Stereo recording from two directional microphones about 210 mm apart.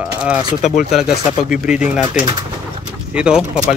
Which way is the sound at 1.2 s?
30° left (ahead or behind).